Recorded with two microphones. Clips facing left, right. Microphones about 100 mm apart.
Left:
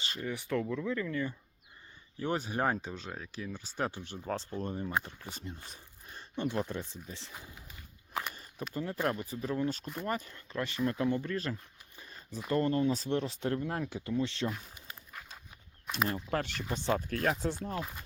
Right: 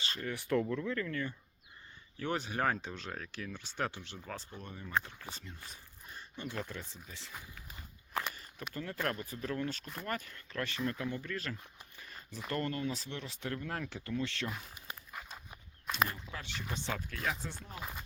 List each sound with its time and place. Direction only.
0.0 s speech: 15° left (ahead or behind)
0.3 s speech: centre (ahead or behind)
2.1 s speech: 25° left (ahead or behind)
2.8 s speech: 5° left (ahead or behind)
3.9 s speech: 35° left (ahead or behind)
4.9 s speech: 15° left (ahead or behind)
8.7 s speech: 20° left (ahead or behind)
12.4 s speech: 20° left (ahead or behind)
15.1 s walk: 5° right (ahead or behind)
16.3 s speech: 55° left (ahead or behind)
16.7 s speech: 40° left (ahead or behind)
17.7 s speech: 5° right (ahead or behind)